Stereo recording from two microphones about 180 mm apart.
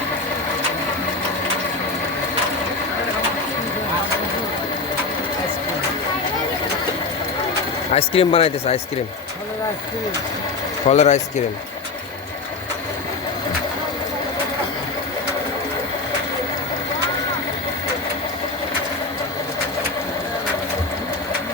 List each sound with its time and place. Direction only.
7.9 s speech: 30° left (ahead or behind)
10.8 s speech: 40° left (ahead or behind)